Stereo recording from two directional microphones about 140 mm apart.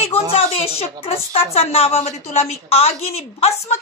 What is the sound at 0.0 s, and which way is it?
A woman's voice, 45° left (ahead or behind).